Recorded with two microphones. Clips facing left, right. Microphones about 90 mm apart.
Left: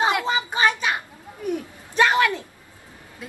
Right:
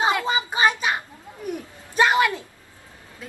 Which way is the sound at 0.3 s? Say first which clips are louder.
Even; 15° right (ahead or behind).